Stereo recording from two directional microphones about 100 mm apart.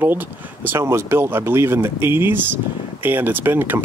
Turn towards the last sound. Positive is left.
turn(degrees=-20)  # may be behind; listen again after turning